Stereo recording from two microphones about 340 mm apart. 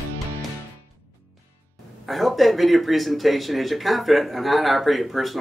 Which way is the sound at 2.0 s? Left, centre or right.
Centre.